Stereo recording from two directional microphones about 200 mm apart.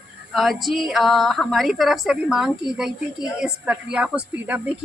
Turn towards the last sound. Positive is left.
turn(degrees=-5)  # may be behind; listen again after turning